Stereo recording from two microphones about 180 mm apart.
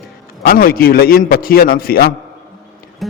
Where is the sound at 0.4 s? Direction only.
55° left (ahead or behind).